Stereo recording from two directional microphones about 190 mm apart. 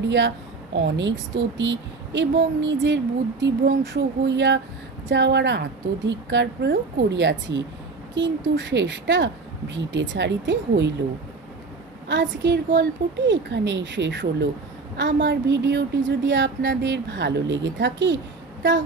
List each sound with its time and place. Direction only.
0.7 s a woman's voice: 70° right (ahead or behind)
12.1 s a woman's voice: 70° right (ahead or behind)